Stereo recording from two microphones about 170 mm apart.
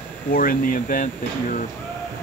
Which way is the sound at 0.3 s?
55° left (ahead or behind).